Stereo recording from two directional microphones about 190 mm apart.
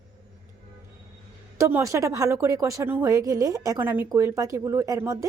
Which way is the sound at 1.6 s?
15° right (ahead or behind).